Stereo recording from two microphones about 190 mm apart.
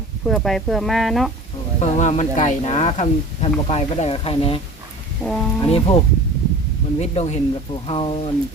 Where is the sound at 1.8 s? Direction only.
40° left (ahead or behind).